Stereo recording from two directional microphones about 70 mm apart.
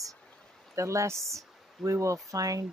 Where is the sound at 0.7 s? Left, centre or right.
Right.